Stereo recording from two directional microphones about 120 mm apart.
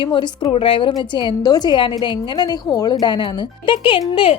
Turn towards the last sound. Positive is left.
turn(degrees=45)  # may be behind; listen again after turning